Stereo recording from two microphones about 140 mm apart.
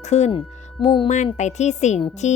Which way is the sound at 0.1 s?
55° left (ahead or behind).